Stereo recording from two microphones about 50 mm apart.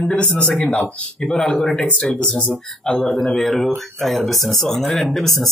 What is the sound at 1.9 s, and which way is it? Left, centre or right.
Speech, left.